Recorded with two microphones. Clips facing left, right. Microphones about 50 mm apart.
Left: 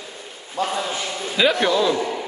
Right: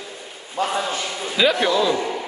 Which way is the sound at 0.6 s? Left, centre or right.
Right.